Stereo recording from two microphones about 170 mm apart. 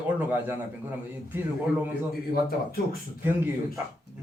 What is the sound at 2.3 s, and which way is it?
Speech, 60° left (ahead or behind).